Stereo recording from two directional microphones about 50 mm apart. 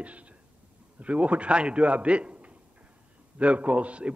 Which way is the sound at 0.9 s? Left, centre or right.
Right.